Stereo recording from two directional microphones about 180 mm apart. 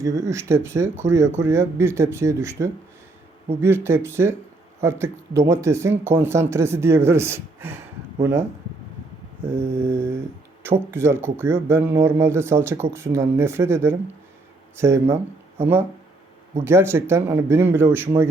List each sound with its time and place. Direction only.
0.0 s speech: 20° right (ahead or behind)
9.5 s speech: 15° right (ahead or behind)